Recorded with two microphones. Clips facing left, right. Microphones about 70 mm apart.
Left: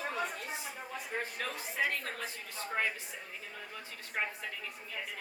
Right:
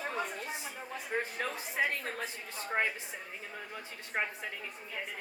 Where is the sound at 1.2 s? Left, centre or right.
Right.